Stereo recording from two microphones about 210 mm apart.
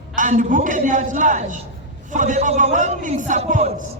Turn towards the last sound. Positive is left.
turn(degrees=-35)  # may be behind; listen again after turning